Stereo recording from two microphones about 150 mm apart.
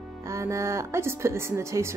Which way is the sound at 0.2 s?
20° right (ahead or behind).